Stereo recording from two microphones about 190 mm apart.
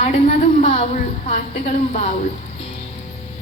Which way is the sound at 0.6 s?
35° left (ahead or behind).